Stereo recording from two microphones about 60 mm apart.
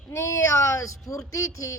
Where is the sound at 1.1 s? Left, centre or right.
Left.